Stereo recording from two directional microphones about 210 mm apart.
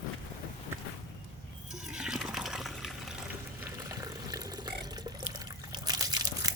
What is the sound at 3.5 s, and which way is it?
Pour, 15° right (ahead or behind).